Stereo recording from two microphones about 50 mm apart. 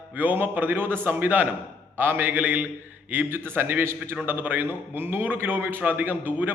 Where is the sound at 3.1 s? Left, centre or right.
Right.